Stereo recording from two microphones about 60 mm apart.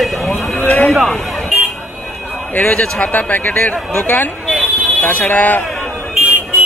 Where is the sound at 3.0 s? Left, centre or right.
Left.